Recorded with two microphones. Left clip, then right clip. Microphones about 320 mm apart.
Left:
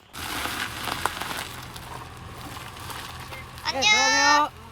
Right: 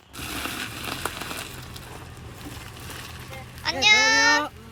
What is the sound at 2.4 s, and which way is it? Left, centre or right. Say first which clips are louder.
Boat: left 3 dB; centre.